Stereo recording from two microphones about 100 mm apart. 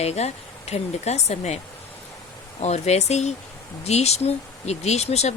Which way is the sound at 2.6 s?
90° left.